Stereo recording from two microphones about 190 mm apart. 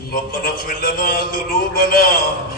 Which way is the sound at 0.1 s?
50° left (ahead or behind).